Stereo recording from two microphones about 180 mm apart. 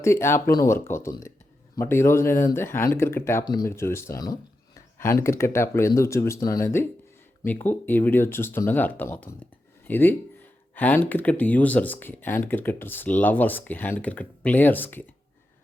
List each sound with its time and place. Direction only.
0.0 s speech: 15° left (ahead or behind)